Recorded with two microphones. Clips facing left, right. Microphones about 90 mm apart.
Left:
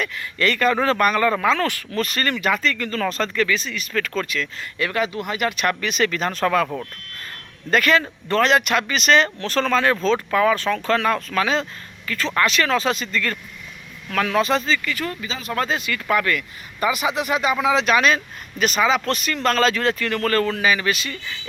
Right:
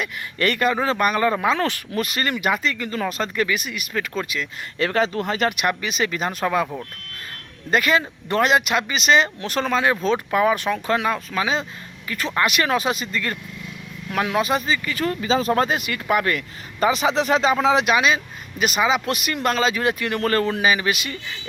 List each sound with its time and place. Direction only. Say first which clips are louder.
0.3 s speech: left 1 dB; 25° right (ahead or behind)
2.0 s speech: even; 10° right (ahead or behind)
4.8 s speech: right 2 dB; 30° right (ahead or behind)
5.5 s speech: even; 10° right (ahead or behind)
7.7 s speech: left 1 dB; 5° right (ahead or behind)
14.8 s speech: right 5 dB; 30° right (ahead or behind)
15.6 s speech: right 1 dB; 20° right (ahead or behind)
17.7 s speech: left 1 dB; 10° right (ahead or behind)